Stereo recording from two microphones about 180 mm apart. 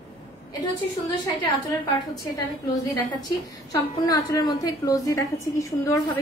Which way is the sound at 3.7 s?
20° left (ahead or behind).